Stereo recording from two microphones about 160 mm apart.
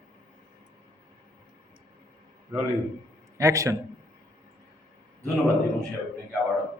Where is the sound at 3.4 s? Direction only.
20° right (ahead or behind).